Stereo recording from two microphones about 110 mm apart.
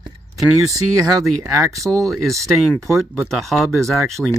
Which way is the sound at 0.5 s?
Centre (ahead or behind).